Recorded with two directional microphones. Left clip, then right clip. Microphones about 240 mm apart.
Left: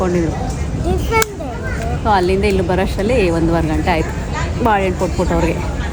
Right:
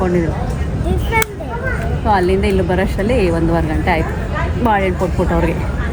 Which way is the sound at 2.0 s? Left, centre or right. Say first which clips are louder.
Even; centre.